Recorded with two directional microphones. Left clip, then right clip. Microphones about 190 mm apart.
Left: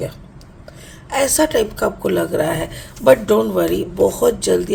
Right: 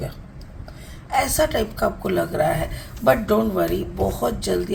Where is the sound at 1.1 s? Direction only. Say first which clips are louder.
Left 4 dB; 50° left (ahead or behind).